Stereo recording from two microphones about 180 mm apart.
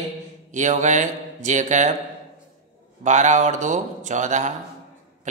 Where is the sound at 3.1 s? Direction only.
40° right (ahead or behind).